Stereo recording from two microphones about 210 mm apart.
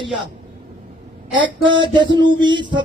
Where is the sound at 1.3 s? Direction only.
25° right (ahead or behind).